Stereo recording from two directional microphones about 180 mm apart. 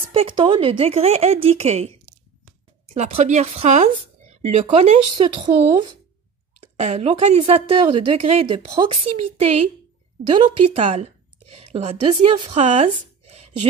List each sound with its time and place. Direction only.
0.1 s a woman's voice: 30° right (ahead or behind)